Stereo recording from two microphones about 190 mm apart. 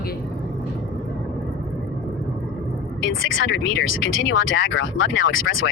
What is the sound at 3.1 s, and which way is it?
Speech, 90° left.